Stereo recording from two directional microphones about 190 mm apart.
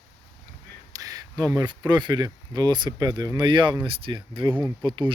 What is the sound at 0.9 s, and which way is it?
Speech, 20° right (ahead or behind).